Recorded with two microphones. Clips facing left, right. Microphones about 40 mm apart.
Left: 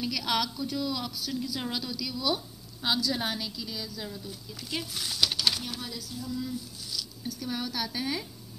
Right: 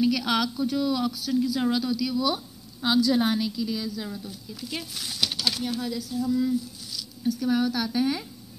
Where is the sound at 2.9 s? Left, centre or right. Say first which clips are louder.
Right 7 dB; right.